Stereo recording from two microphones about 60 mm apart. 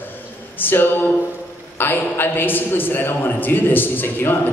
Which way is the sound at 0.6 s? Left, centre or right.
Left.